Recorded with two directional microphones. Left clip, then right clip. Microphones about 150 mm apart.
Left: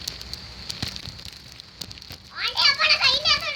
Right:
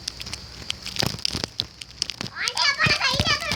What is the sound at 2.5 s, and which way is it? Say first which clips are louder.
Children playing: left 2 dB; 20° right (ahead or behind).